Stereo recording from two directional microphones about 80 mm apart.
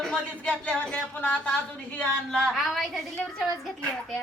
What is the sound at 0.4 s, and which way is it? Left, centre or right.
A woman's voice, centre.